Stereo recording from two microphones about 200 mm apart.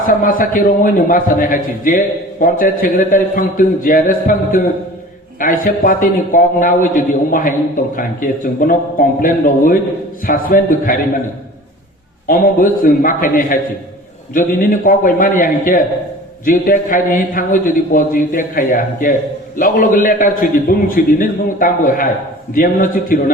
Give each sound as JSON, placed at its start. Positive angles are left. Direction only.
{"t": 0.1, "sound": "a man's voice", "side_deg": 45}
{"t": 12.3, "sound": "a man's voice", "side_deg": 45}